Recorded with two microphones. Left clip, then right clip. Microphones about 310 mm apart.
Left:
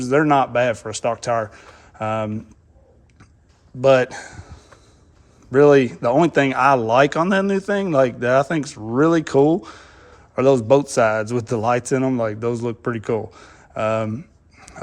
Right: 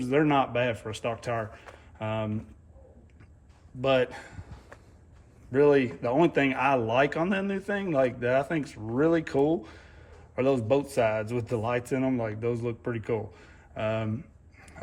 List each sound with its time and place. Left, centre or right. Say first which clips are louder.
0.0 s a man's voice: left 8 dB; centre
3.8 s a man's voice: left 10 dB; centre
5.5 s a man's voice: left 9 dB; centre